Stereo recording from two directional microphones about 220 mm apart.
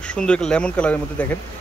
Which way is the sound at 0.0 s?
5° left (ahead or behind).